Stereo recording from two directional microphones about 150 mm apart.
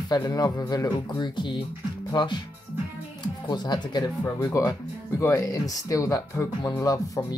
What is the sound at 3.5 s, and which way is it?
Speech, 30° left (ahead or behind).